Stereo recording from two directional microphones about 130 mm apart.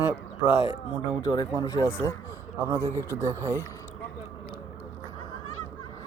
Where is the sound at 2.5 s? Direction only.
20° right (ahead or behind).